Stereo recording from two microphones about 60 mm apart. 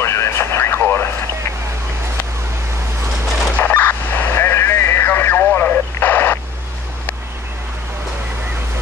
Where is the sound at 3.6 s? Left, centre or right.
Left.